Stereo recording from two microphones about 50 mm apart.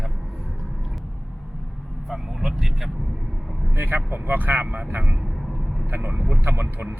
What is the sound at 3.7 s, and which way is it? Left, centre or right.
Speech, right.